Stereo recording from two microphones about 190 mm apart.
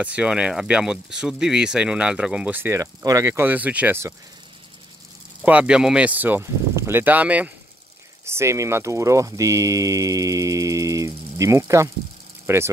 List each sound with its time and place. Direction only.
0.0 s speech: 5° right (ahead or behind)
5.4 s speech: 5° right (ahead or behind)